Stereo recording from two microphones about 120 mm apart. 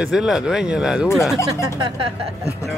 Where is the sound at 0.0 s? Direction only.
5° right (ahead or behind).